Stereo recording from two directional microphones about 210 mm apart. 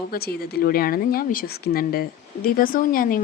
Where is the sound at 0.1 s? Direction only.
50° left (ahead or behind).